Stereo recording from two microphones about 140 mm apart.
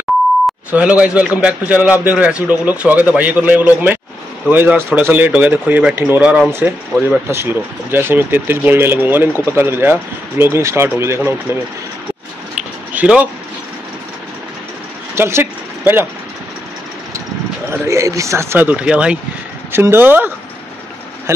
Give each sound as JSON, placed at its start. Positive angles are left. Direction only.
{"t": 0.7, "sound": "speech", "side_deg": -10}
{"t": 12.9, "sound": "speech", "side_deg": -10}
{"t": 15.1, "sound": "speech", "side_deg": -20}
{"t": 17.6, "sound": "speech", "side_deg": -20}